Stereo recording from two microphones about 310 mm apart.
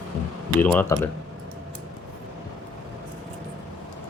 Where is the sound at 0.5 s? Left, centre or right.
Centre.